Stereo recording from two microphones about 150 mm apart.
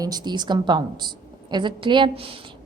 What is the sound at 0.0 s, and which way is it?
A woman's voice, 25° right (ahead or behind).